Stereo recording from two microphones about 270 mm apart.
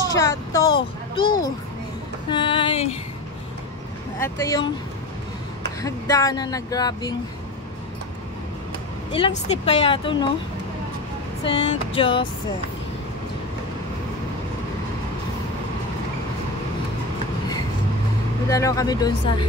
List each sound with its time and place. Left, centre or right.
0.1 s a child's voice: centre
4.2 s speech: centre
5.8 s speech: centre
9.1 s speech: left
11.4 s speech: centre
18.5 s speech: centre